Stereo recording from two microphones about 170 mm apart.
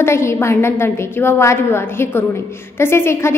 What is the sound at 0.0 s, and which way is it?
A woman's voice, 15° left (ahead or behind).